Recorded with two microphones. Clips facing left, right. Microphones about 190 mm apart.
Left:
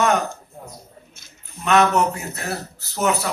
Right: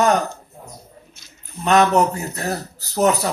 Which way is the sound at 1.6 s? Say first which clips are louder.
Right 2 dB; 35° right (ahead or behind).